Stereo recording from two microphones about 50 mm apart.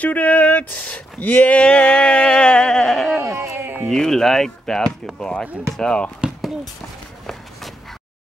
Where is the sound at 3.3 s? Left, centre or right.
Right.